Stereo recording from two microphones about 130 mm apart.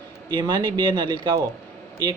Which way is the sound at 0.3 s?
35° right (ahead or behind).